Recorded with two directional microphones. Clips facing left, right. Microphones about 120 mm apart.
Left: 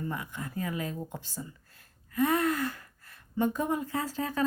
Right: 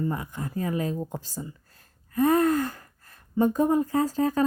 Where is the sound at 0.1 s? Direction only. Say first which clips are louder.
Right 5 dB; 40° right (ahead or behind).